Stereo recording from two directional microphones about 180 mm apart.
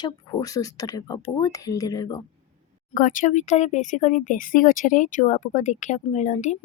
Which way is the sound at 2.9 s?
45° left (ahead or behind).